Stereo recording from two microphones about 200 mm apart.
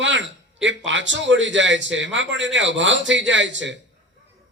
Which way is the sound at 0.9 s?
65° right (ahead or behind).